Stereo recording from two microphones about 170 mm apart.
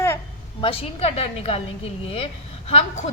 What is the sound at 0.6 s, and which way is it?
Speech, 35° left (ahead or behind).